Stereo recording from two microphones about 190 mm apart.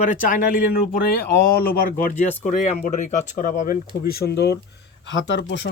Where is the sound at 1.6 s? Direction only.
50° left (ahead or behind).